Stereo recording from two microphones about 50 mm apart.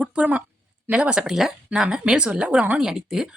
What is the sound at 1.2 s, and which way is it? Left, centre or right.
Speech, centre.